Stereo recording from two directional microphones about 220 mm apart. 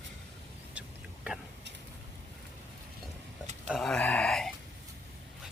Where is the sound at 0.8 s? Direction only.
5° right (ahead or behind).